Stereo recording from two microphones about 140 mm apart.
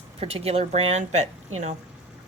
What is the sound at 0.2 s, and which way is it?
Speech, 45° right (ahead or behind).